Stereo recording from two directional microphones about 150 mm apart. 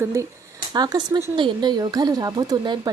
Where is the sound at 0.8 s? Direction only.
30° right (ahead or behind).